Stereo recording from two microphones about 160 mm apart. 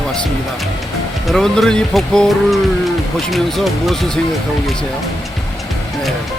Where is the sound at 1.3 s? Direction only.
5° left (ahead or behind).